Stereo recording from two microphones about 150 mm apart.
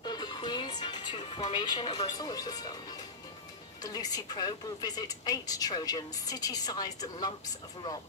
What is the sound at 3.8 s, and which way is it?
A woman's voice, 25° left (ahead or behind).